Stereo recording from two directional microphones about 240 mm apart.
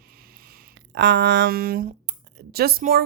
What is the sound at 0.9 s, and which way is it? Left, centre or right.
Speech, right.